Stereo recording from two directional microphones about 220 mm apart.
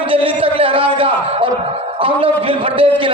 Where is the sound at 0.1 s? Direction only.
25° right (ahead or behind).